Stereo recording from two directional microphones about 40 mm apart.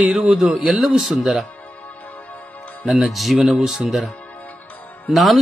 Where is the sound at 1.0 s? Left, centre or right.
Centre.